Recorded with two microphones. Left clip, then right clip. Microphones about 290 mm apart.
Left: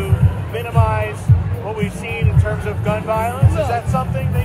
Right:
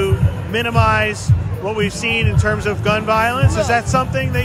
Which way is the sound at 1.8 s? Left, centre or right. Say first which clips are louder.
Right 9 dB; right.